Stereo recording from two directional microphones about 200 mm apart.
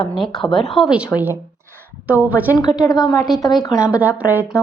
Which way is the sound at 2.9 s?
20° left (ahead or behind).